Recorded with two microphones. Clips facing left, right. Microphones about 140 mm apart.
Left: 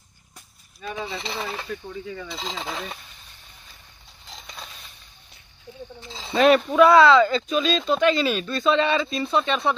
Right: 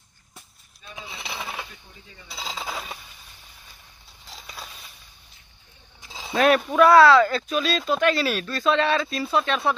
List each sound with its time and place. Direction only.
1.1 s speech: 10° right (ahead or behind)
1.7 s speech: 85° left
2.3 s speech: 5° right (ahead or behind)
4.3 s a sound: 5° right (ahead or behind)
5.9 s speech: 10° right (ahead or behind)